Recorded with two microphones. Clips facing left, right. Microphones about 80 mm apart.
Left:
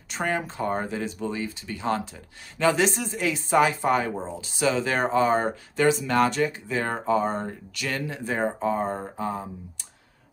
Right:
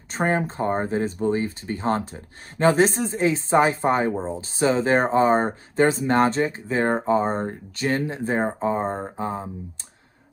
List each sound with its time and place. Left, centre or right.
0.1 s speech: right